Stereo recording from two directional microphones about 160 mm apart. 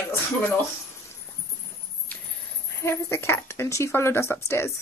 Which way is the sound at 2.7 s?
15° left (ahead or behind).